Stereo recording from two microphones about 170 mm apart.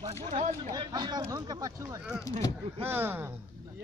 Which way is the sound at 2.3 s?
20° left (ahead or behind).